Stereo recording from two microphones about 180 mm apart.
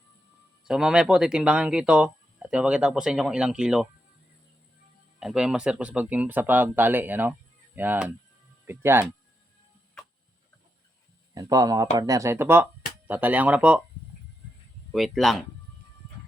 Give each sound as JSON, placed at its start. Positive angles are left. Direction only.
{"t": 0.6, "sound": "speech", "side_deg": -5}
{"t": 5.2, "sound": "speech", "side_deg": -5}
{"t": 11.3, "sound": "speech", "side_deg": -20}
{"t": 14.9, "sound": "speech", "side_deg": 0}